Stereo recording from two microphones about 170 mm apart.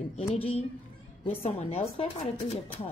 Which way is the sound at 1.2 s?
35° left (ahead or behind).